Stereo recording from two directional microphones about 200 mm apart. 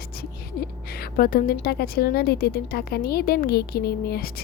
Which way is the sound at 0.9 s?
50° left (ahead or behind).